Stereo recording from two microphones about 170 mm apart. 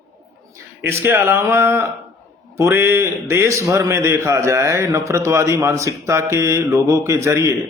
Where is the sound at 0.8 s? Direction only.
15° right (ahead or behind).